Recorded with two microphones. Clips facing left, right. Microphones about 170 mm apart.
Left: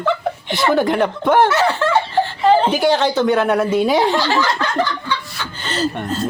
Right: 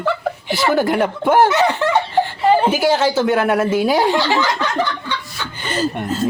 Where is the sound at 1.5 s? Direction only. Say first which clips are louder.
Even; 20° right (ahead or behind).